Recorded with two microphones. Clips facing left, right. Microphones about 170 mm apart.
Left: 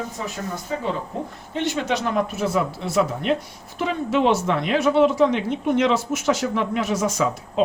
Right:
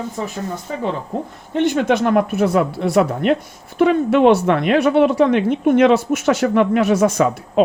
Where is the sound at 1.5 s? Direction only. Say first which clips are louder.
Right 8 dB; 50° right (ahead or behind).